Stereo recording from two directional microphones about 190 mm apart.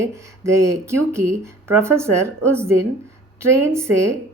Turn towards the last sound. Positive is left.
turn(degrees=-15)  # may be behind; listen again after turning